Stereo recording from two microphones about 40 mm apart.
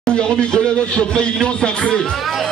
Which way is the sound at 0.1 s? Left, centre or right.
Left.